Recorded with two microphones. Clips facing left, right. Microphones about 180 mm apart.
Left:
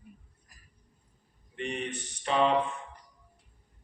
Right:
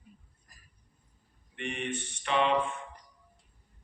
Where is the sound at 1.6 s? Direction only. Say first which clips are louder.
Left 1 dB; 35° left (ahead or behind).